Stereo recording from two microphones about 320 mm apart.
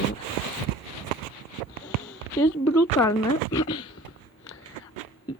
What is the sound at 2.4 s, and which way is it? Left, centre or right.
Speech, left.